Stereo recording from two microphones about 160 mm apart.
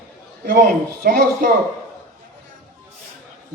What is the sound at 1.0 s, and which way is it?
Speech, 65° right (ahead or behind).